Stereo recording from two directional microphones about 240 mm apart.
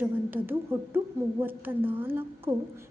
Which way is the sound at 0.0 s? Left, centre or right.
Centre.